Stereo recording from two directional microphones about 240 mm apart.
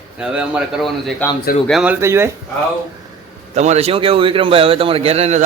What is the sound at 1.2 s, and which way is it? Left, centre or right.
Speech, centre.